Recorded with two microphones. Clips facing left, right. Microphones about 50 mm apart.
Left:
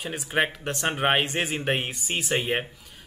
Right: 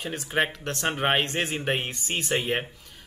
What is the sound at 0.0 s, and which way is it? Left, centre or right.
Speech, centre.